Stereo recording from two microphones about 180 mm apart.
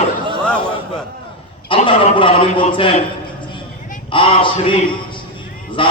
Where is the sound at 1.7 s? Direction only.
30° left (ahead or behind).